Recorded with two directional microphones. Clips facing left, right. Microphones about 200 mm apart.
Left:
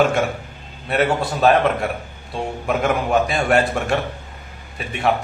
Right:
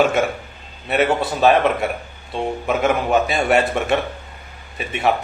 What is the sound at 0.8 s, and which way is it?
A man's voice, 5° right (ahead or behind).